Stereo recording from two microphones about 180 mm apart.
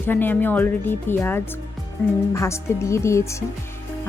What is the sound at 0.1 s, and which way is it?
A woman's voice, 10° left (ahead or behind).